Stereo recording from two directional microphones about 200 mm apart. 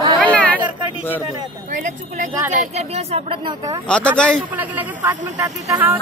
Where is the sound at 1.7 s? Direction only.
40° right (ahead or behind); by 3.8 s 25° right (ahead or behind).